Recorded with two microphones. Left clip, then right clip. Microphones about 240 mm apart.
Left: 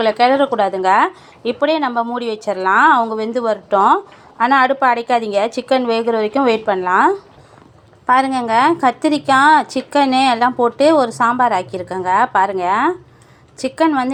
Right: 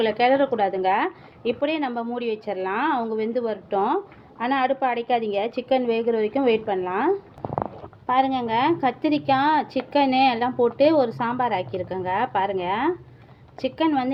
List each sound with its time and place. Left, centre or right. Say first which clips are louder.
0.0 s a woman's voice: left 6 dB; centre